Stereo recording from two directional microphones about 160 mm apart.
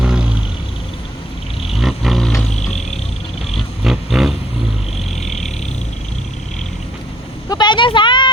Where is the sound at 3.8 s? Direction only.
Centre (ahead or behind).